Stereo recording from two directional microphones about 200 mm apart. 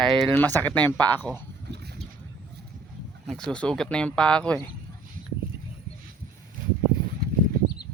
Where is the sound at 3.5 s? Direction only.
5° left (ahead or behind).